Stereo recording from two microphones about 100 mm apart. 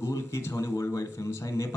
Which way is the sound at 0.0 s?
30° left (ahead or behind).